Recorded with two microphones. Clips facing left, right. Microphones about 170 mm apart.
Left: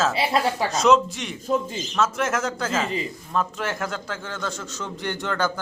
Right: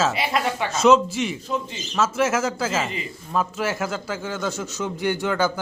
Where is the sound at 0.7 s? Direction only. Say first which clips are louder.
Right 3 dB; centre (ahead or behind).